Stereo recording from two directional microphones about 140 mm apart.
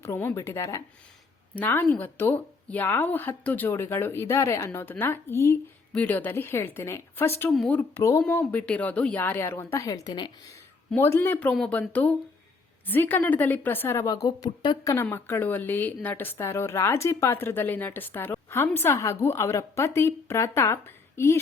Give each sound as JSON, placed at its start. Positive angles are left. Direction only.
{"t": 0.0, "sound": "a woman's voice", "side_deg": 15}
{"t": 10.9, "sound": "a woman's voice", "side_deg": 15}
{"t": 14.3, "sound": "speech", "side_deg": 30}
{"t": 14.9, "sound": "a woman's voice", "side_deg": 15}